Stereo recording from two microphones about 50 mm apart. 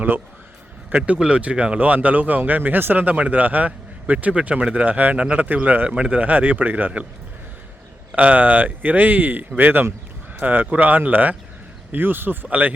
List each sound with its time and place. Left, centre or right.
0.9 s speech: right
8.1 s speech: right